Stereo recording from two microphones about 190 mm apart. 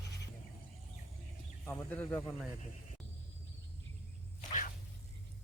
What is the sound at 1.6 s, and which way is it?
Speech, 10° left (ahead or behind).